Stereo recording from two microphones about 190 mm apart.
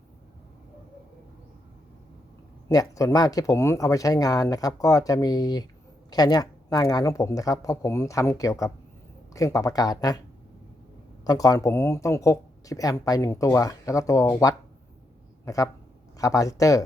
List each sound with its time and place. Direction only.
2.6 s speech: 15° left (ahead or behind)
11.2 s speech: 20° left (ahead or behind)